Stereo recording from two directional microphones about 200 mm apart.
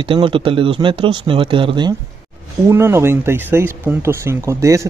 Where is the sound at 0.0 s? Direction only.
25° right (ahead or behind).